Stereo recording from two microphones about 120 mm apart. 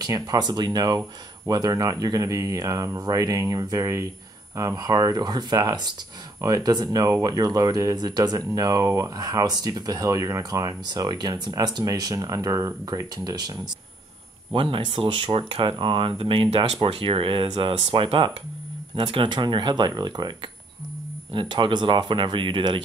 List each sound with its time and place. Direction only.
0.0 s speech: 30° right (ahead or behind)
14.5 s speech: 45° right (ahead or behind)